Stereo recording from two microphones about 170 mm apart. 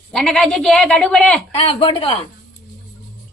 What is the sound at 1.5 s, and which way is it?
Speech, 30° left (ahead or behind).